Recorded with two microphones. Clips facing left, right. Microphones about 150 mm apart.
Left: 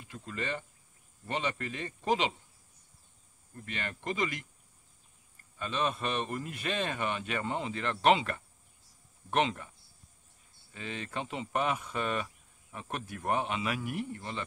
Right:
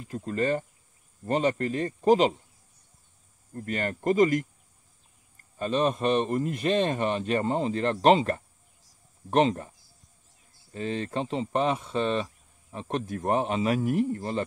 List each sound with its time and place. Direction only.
0.0 s speech: 40° right (ahead or behind)
3.5 s speech: 45° right (ahead or behind)
5.6 s speech: 35° right (ahead or behind)